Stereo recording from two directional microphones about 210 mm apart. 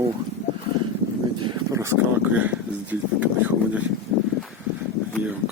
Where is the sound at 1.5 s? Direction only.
15° right (ahead or behind).